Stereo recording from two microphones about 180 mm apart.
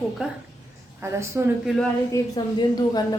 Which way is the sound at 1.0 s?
15° right (ahead or behind).